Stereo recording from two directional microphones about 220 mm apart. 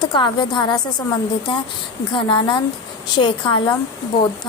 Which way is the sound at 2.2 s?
20° left (ahead or behind).